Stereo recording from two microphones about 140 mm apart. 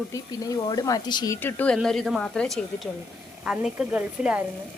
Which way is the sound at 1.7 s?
Centre (ahead or behind).